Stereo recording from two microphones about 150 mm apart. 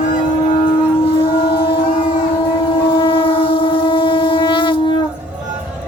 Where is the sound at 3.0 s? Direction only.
35° left (ahead or behind).